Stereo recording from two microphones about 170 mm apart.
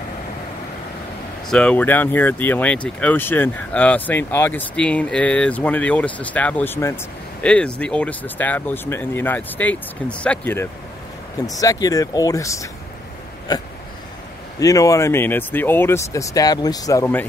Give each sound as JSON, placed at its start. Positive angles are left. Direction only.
{"t": 1.5, "sound": "speech", "side_deg": 5}